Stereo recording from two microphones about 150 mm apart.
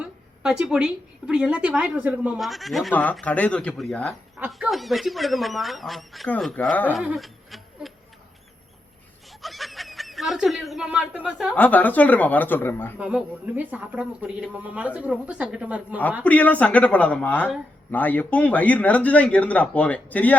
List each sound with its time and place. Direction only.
0.0 s a sound: 5° right (ahead or behind)
1.3 s a woman's voice: 5° right (ahead or behind)
2.9 s speech: 10° left (ahead or behind)
4.4 s speech: 10° right (ahead or behind); by 6.9 s 10° left (ahead or behind)
6.9 s a sound: 5° right (ahead or behind)
9.4 s snicker: centre (ahead or behind)
11.5 s speech: 10° left (ahead or behind)
13.0 s a woman's voice: 5° right (ahead or behind)
16.2 s speech: 10° left (ahead or behind)